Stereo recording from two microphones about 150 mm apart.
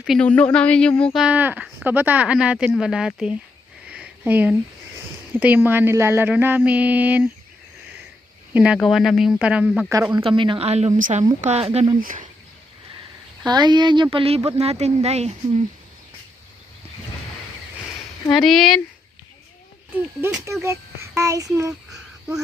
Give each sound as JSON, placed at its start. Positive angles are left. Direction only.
{"t": 0.0, "sound": "speech", "side_deg": 0}
{"t": 0.3, "sound": "a sound", "side_deg": 10}
{"t": 1.2, "sound": "mantra", "side_deg": -10}
{"t": 3.8, "sound": "sniff", "side_deg": -10}
{"t": 5.3, "sound": "mantra", "side_deg": -10}
{"t": 8.5, "sound": "speech", "side_deg": -5}
{"t": 10.2, "sound": "a woman's voice", "side_deg": -35}
{"t": 11.4, "sound": "a woman's voice", "side_deg": -45}
{"t": 11.9, "sound": "speech", "side_deg": -60}
{"t": 13.4, "sound": "speech", "side_deg": -30}
{"t": 18.3, "sound": "speech", "side_deg": 0}
{"t": 20.2, "sound": "speech", "side_deg": -15}